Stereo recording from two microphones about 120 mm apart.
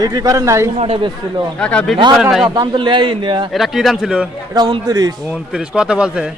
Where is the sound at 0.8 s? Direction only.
45° right (ahead or behind).